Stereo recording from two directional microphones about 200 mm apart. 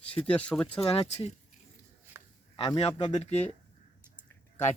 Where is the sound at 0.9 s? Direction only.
30° left (ahead or behind).